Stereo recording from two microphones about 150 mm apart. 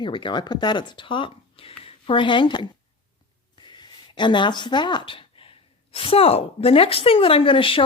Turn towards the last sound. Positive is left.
turn(degrees=35)  # may be behind; listen again after turning